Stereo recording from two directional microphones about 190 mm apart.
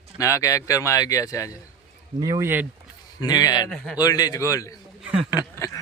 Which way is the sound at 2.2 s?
15° right (ahead or behind).